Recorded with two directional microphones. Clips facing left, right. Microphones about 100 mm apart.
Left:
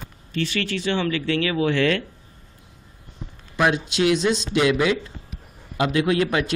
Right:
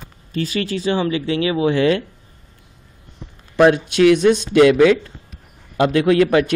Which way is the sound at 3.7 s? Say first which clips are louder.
Right 7 dB; 25° left (ahead or behind).